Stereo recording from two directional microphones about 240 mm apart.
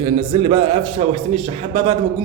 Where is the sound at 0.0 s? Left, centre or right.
Right.